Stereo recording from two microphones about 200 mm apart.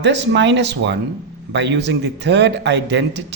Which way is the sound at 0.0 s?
60° right (ahead or behind).